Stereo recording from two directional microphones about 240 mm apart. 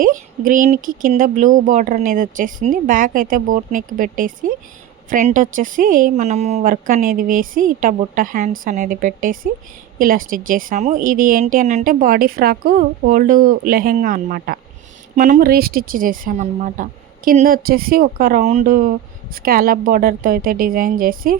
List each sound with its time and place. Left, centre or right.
0.0 s a woman's voice: right